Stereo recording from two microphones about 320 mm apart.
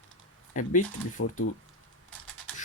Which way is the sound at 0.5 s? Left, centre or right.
Left.